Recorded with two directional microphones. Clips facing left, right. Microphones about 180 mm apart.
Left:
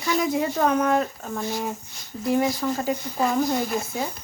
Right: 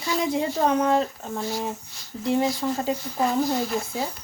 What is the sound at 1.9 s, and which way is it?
Speech, 20° left (ahead or behind).